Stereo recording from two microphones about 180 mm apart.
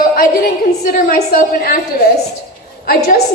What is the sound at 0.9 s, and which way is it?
Speech, 55° left (ahead or behind).